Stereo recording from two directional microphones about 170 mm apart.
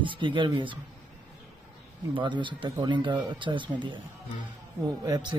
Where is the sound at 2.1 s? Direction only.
30° right (ahead or behind).